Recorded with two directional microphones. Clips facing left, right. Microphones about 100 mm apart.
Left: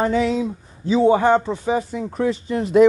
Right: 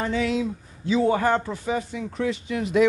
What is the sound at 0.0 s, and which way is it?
Speech, 40° left (ahead or behind).